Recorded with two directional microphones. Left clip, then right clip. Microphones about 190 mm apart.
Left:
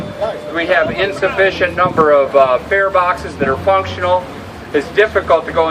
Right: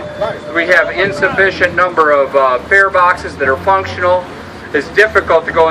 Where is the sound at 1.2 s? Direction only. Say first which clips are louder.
Right 2 dB; 15° right (ahead or behind).